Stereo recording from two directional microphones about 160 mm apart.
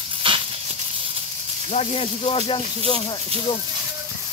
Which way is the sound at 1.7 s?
40° left (ahead or behind).